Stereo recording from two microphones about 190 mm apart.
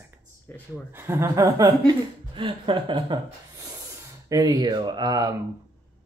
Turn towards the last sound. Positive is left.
turn(degrees=-20)  # may be behind; listen again after turning